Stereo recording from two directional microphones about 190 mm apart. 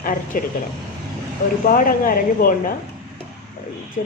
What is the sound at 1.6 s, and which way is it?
A woman's voice, 45° left (ahead or behind).